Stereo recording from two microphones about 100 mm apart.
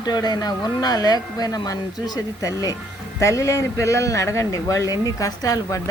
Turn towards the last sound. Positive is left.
turn(degrees=35)  # may be behind; listen again after turning